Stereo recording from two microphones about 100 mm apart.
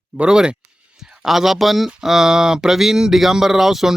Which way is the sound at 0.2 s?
5° right (ahead or behind).